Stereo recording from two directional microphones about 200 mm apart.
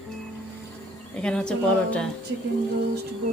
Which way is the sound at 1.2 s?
5° left (ahead or behind).